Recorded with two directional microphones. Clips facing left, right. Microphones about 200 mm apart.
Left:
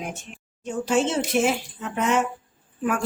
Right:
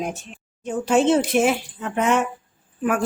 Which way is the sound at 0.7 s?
60° right (ahead or behind).